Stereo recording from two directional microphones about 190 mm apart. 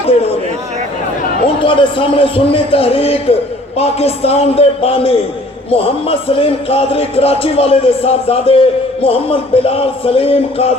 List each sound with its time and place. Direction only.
1.6 s a man's voice: 25° left (ahead or behind)